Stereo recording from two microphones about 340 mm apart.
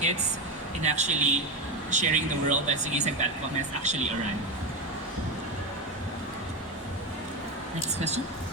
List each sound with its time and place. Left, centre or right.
0.8 s speech: centre